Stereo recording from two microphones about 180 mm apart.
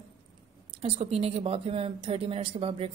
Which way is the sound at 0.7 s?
30° right (ahead or behind).